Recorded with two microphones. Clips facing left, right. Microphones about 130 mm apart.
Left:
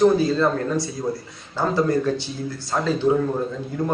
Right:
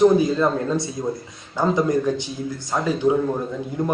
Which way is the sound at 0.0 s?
15° right (ahead or behind).